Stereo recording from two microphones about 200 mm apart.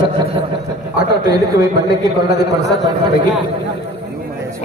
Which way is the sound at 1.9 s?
20° right (ahead or behind).